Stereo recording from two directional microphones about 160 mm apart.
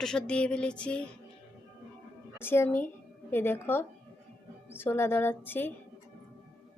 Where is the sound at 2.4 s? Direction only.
15° left (ahead or behind).